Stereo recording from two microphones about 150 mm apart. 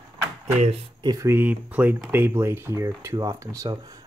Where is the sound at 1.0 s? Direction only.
20° right (ahead or behind).